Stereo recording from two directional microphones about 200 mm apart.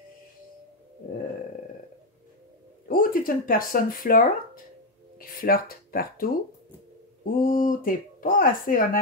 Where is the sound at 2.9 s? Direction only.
45° left (ahead or behind).